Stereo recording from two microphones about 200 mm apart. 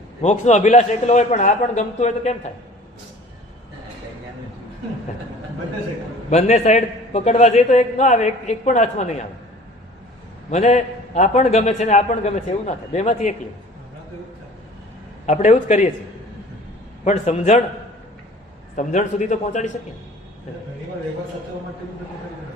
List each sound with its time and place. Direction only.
0.2 s a man's voice: 35° left (ahead or behind)
6.3 s a man's voice: 35° left (ahead or behind)
10.5 s a man's voice: 35° left (ahead or behind)
15.3 s a man's voice: 35° left (ahead or behind)
17.0 s a man's voice: 35° left (ahead or behind)
18.8 s a man's voice: 35° left (ahead or behind)